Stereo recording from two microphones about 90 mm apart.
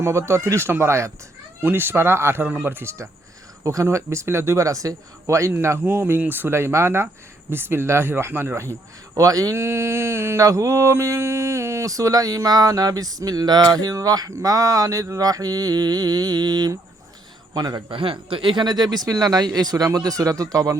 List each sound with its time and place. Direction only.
0.0 s speech: 30° right (ahead or behind)
3.6 s speech: 35° right (ahead or behind)
5.8 s speech: 20° right (ahead or behind)
9.1 s a man's voice: 40° right (ahead or behind)
17.9 s speech: 85° right; by 20.7 s 40° right (ahead or behind)